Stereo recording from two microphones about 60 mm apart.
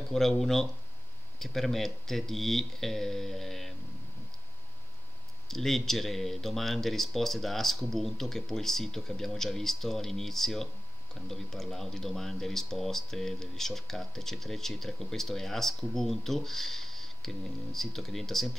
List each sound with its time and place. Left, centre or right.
0.1 s speech: centre
5.5 s speech: centre